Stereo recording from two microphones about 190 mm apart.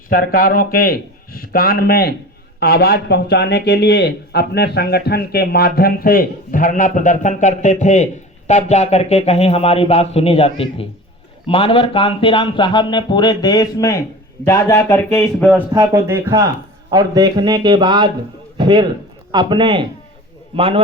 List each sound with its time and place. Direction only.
0.1 s a man's voice: 50° left (ahead or behind); by 15.4 s 15° left (ahead or behind)
15.7 s a man's voice: 15° right (ahead or behind)